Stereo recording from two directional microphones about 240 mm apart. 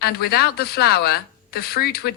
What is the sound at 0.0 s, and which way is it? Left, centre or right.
A woman's voice, left.